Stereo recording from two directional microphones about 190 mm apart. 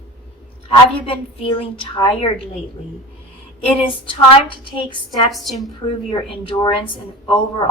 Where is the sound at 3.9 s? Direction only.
25° left (ahead or behind).